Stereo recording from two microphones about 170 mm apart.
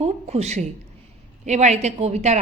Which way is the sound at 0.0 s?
40° right (ahead or behind).